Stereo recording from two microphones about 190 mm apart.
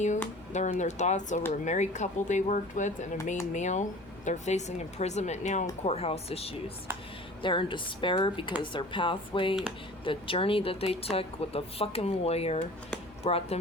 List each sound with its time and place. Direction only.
0.5 s a woman's voice: 40° left (ahead or behind)